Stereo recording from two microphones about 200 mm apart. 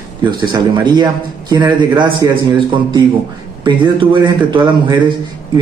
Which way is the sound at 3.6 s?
25° right (ahead or behind).